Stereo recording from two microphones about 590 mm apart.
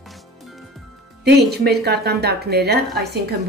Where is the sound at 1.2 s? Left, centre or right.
Centre.